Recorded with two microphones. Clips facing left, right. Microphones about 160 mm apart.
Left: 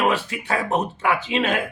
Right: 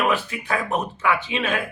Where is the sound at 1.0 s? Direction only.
35° left (ahead or behind).